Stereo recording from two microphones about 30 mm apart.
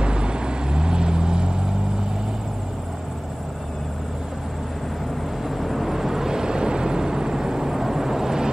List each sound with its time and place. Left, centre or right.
0.0 s vehicle: right
5.6 s vehicle: centre
5.9 s vehicle: centre